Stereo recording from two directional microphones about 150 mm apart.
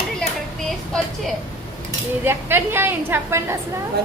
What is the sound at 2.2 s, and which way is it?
A woman's voice, 15° right (ahead or behind).